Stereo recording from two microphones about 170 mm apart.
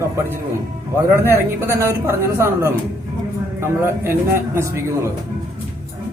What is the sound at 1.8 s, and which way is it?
A man's voice, 15° right (ahead or behind).